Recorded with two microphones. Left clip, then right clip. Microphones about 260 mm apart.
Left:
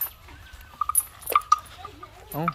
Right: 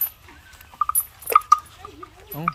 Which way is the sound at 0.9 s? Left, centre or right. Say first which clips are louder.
Right 6 dB; centre.